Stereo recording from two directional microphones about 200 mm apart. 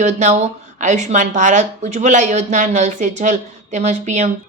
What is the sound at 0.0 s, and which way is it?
Speech, 35° right (ahead or behind).